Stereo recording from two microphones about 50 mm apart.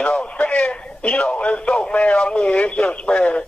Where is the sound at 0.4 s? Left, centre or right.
Left.